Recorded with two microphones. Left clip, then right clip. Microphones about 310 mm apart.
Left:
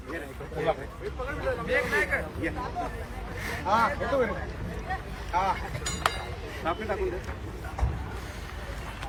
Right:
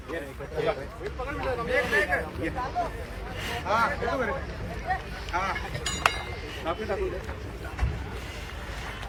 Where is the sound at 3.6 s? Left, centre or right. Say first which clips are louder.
Left 1 dB; left.